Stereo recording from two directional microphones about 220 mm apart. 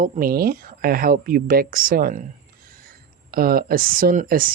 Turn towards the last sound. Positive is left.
turn(degrees=-40)  # may be behind; listen again after turning